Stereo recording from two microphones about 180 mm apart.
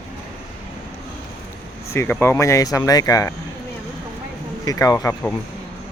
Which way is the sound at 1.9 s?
10° left (ahead or behind).